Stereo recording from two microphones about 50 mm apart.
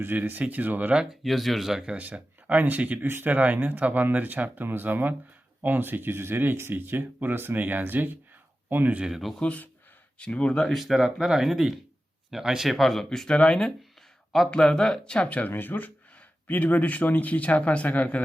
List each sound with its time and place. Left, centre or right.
0.0 s speech: right
1.2 s speech: centre
2.0 s speech: right
9.0 s speech: centre
9.4 s speech: left
10.7 s speech: centre
10.9 s speech: centre
12.7 s speech: centre
13.1 s speech: centre
15.4 s speech: left